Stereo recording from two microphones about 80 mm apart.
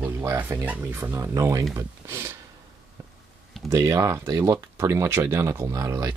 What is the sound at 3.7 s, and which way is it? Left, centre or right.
Speech, right.